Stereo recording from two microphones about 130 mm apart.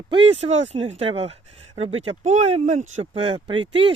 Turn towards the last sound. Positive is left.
turn(degrees=-40)  # may be behind; listen again after turning